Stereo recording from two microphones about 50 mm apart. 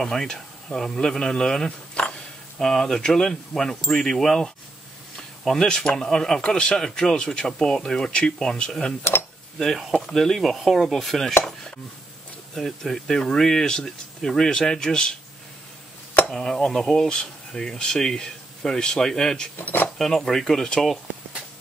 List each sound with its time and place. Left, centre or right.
0.0 s speech: centre
5.1 s a sound: centre
5.7 s speech: centre
9.9 s speech: centre
12.5 s speech: centre
16.3 s speech: centre
19.6 s speech: left
20.0 s speech: centre